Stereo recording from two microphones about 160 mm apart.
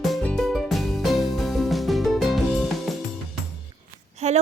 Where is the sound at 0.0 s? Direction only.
Centre (ahead or behind).